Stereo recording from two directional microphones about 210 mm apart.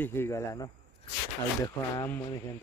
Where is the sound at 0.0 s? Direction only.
10° left (ahead or behind).